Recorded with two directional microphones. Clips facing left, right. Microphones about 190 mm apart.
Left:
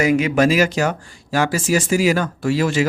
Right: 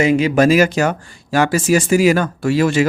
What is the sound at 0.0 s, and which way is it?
Speech, 30° right (ahead or behind).